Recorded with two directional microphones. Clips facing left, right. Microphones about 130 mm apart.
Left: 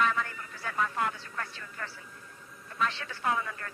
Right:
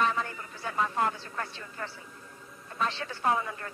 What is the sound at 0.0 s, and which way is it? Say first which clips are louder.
A man's voice: even; 25° right (ahead or behind).